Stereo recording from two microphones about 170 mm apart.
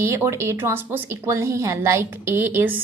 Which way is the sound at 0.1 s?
15° right (ahead or behind).